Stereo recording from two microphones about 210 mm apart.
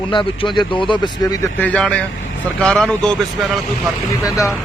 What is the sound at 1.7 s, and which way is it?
Speech, 5° left (ahead or behind).